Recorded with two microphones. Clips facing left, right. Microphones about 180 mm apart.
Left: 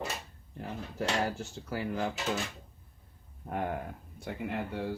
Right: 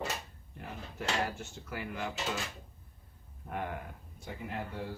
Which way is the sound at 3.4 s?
40° left (ahead or behind).